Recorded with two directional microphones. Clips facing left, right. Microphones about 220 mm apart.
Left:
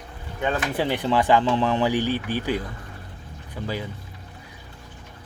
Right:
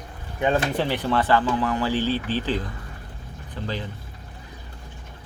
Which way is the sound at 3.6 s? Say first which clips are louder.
Left 1 dB; 10° left (ahead or behind).